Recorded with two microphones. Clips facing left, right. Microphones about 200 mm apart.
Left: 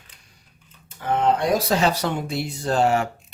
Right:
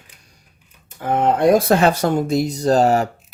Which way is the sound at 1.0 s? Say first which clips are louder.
Right 4 dB; 45° right (ahead or behind).